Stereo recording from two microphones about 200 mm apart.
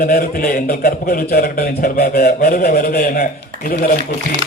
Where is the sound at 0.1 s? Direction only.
50° left (ahead or behind).